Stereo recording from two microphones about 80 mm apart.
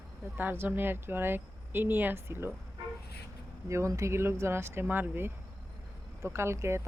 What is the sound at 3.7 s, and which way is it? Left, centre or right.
Speech, right.